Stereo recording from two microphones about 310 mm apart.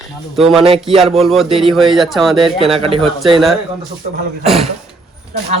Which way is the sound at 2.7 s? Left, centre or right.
Centre.